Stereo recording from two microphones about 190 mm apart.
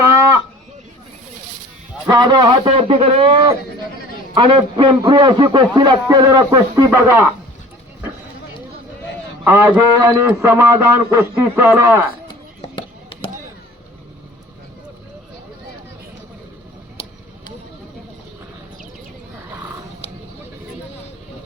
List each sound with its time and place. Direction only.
0.0 s a sound: 15° right (ahead or behind)
2.0 s a man's voice: 25° right (ahead or behind)
9.4 s a man's voice: 10° right (ahead or behind)
12.7 s chop: 25° left (ahead or behind)